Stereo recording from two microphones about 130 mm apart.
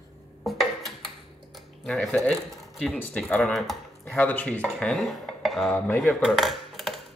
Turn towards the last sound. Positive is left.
turn(degrees=0)  # may be behind; listen again after turning